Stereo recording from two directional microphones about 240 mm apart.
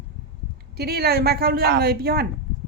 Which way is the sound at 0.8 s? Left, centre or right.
Right.